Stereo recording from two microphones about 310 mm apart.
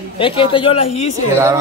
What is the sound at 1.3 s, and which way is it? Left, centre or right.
Cattle, centre.